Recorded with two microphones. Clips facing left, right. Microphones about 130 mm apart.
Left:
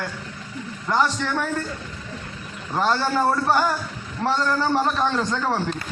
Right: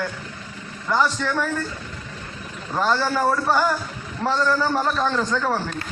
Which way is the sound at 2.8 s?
15° left (ahead or behind).